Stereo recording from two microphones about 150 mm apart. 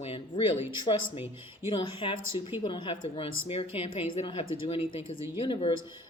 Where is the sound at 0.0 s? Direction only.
40° left (ahead or behind).